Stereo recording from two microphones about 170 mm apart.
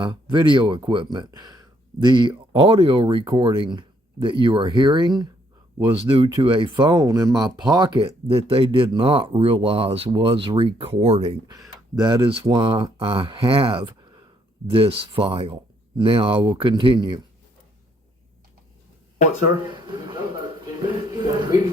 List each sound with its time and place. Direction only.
0.0 s speech: 30° right (ahead or behind)